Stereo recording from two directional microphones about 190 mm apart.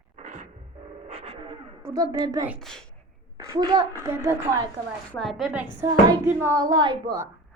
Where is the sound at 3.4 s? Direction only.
15° right (ahead or behind).